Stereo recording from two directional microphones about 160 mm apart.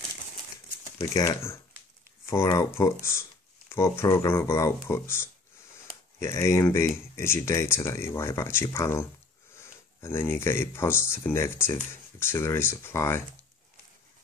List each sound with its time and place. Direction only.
0.9 s speech: 20° left (ahead or behind)